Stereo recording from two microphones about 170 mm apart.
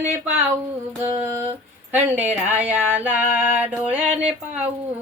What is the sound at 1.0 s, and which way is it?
Mantra, 15° right (ahead or behind).